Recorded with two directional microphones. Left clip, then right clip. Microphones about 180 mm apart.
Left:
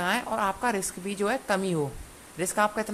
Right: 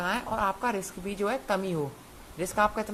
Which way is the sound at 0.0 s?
15° left (ahead or behind).